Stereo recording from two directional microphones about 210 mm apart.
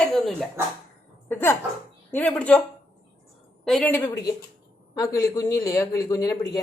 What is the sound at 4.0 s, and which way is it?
A man's voice, 15° left (ahead or behind).